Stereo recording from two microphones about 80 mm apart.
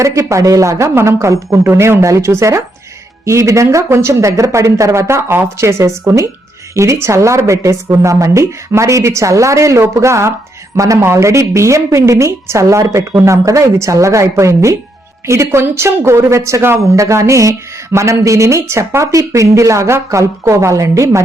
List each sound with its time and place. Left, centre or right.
0.0 s a woman's voice: right